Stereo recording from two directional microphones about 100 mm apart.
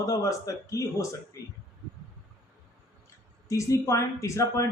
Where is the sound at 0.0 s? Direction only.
35° left (ahead or behind).